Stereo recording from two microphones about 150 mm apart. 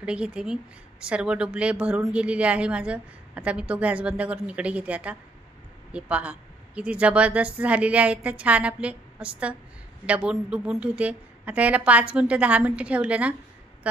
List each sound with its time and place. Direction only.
0.0 s speech: 5° right (ahead or behind)